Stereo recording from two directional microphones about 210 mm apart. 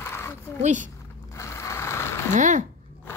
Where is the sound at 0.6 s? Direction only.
35° right (ahead or behind).